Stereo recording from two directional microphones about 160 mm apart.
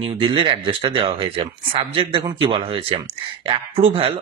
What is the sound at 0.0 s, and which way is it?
Speech, 30° right (ahead or behind).